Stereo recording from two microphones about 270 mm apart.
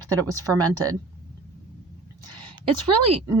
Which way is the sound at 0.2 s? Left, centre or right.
Centre.